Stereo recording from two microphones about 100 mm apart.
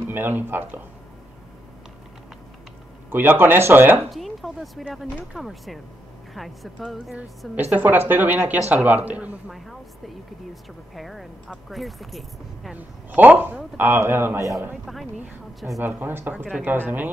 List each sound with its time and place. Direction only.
0.0 s speech: 20° right (ahead or behind)
3.1 s speech: 20° right (ahead or behind)
4.1 s speech: centre (ahead or behind)
7.7 s speech: 15° right (ahead or behind)
9.5 s speech: centre (ahead or behind)
12.7 s speech: 15° right (ahead or behind)
15.8 s speech: 20° right (ahead or behind)